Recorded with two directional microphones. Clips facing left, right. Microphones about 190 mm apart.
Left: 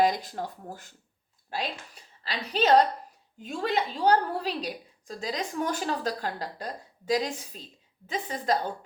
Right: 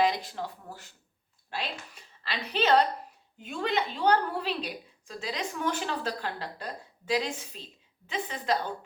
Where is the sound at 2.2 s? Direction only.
40° left (ahead or behind).